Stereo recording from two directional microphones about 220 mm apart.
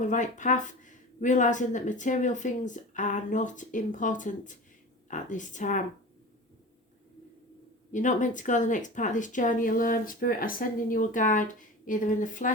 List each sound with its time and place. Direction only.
0.0 s speech: 35° left (ahead or behind)
7.9 s speech: 35° left (ahead or behind)